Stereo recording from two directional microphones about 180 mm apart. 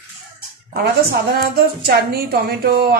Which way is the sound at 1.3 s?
60° right (ahead or behind).